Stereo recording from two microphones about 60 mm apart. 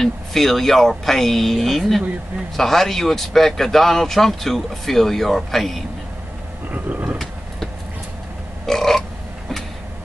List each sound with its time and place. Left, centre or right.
0.0 s speech: centre
6.7 s a sound: right
8.6 s burping: centre